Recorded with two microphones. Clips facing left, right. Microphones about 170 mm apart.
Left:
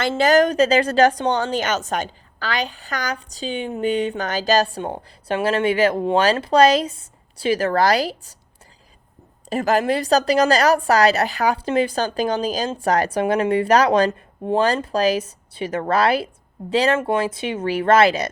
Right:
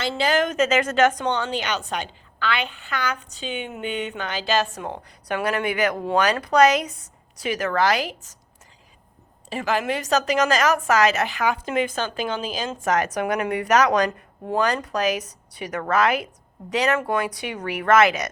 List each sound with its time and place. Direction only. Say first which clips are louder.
0.0 s a woman's voice: left 6 dB; 45° left (ahead or behind)
9.5 s a woman's voice: left 5 dB; 40° left (ahead or behind)